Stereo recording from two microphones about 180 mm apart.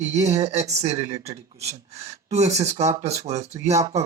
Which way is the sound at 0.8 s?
35° right (ahead or behind).